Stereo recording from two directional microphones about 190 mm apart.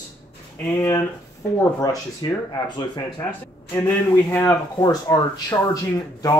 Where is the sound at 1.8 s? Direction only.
20° left (ahead or behind).